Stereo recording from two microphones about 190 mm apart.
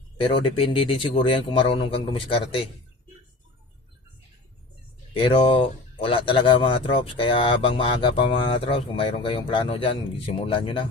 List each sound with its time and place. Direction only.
0.2 s speech: 30° left (ahead or behind)
5.1 s speech: 30° left (ahead or behind)